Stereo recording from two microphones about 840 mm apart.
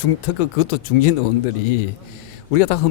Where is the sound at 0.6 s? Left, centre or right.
Left.